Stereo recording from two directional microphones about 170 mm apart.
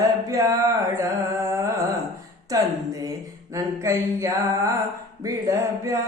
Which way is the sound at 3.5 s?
15° right (ahead or behind).